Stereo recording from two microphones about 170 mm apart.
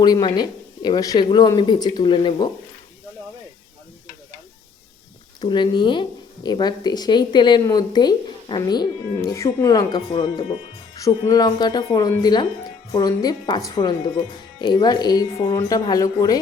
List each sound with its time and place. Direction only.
0.0 s speech: 25° left (ahead or behind)
5.4 s speech: 25° left (ahead or behind)